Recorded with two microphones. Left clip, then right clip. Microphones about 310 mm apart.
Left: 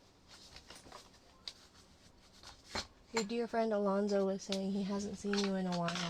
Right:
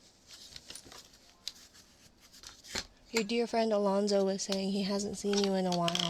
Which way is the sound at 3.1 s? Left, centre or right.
Right.